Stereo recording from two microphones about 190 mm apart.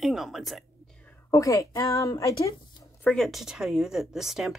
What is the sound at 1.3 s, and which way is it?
A woman's voice, 15° left (ahead or behind).